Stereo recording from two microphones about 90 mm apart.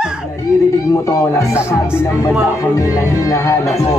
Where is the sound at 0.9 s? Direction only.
40° left (ahead or behind).